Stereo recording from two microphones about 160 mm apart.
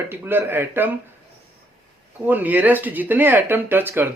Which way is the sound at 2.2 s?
10° right (ahead or behind).